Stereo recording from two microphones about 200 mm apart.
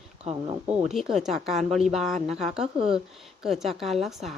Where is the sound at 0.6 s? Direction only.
5° right (ahead or behind).